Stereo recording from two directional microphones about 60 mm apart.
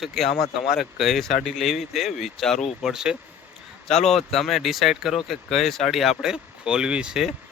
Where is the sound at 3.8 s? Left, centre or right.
Centre.